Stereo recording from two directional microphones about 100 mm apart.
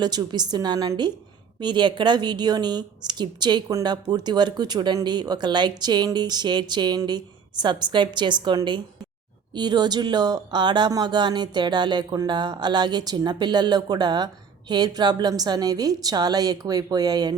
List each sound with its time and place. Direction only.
0.0 s a woman's voice: 45° right (ahead or behind)